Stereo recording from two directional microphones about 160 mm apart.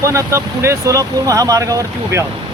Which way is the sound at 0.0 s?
20° right (ahead or behind).